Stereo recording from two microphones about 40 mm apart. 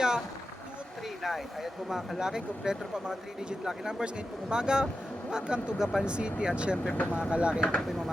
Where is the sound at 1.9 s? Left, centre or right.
Centre.